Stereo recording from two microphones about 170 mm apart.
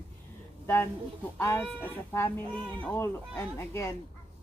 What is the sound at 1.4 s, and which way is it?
Speech, 15° left (ahead or behind).